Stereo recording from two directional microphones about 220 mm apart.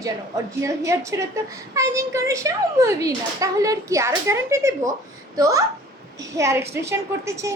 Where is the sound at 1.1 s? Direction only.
15° right (ahead or behind).